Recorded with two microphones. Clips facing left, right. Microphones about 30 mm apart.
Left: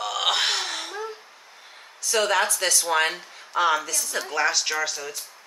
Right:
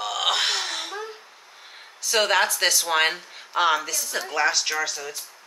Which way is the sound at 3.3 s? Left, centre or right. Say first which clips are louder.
Left 2 dB; right.